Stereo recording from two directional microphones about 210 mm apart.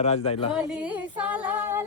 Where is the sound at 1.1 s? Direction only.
5° right (ahead or behind).